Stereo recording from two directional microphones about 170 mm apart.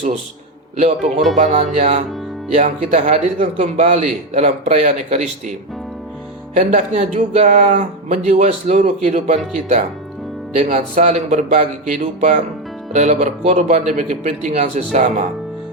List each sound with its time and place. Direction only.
0.8 s a man's voice: 40° right (ahead or behind)
6.6 s a man's voice: 45° right (ahead or behind)
10.6 s a man's voice: 50° right (ahead or behind)